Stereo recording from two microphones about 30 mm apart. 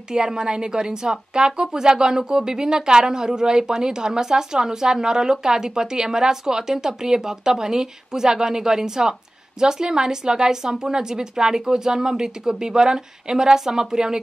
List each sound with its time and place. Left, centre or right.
0.1 s a woman's voice: right